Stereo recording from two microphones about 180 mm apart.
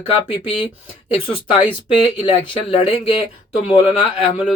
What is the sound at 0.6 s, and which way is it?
Speech, 30° left (ahead or behind).